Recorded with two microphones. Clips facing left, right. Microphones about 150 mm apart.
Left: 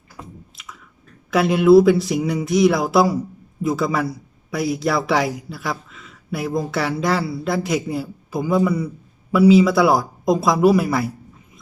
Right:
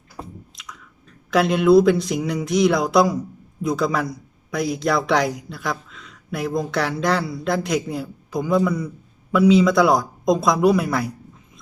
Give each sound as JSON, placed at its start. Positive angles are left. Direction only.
{"t": 0.2, "sound": "squish", "side_deg": -35}
{"t": 0.5, "sound": "chewing", "side_deg": 5}
{"t": 1.3, "sound": "a man's voice", "side_deg": 5}